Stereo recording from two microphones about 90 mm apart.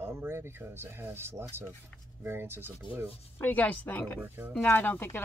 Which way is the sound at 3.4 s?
20° left (ahead or behind).